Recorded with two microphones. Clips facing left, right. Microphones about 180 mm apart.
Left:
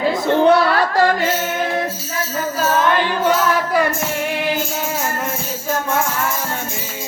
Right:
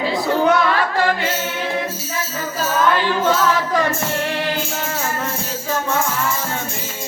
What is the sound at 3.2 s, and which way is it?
Music, 10° left (ahead or behind).